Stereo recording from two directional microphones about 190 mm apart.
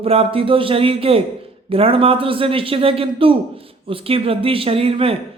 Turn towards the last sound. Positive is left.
turn(degrees=-30)  # may be behind; listen again after turning